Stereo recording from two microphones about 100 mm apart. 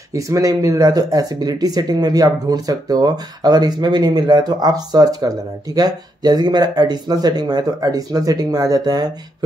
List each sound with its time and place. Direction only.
0.1 s speech: 35° right (ahead or behind)